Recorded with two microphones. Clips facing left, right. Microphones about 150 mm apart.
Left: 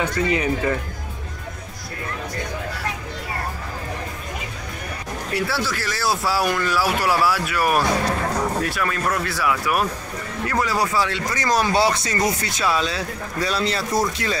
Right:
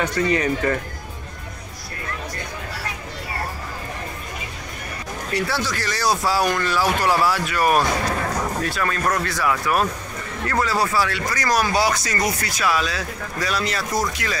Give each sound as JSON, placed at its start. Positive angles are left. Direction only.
{"t": 0.0, "sound": "speech", "side_deg": 10}
{"t": 5.3, "sound": "speech", "side_deg": 5}